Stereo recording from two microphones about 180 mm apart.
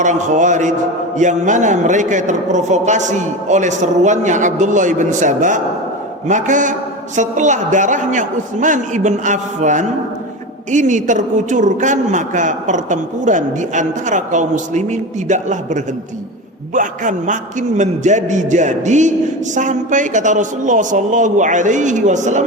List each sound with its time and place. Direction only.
0.0 s a woman's voice: 45° right (ahead or behind)